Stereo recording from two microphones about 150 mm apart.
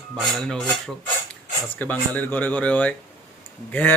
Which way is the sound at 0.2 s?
5° left (ahead or behind).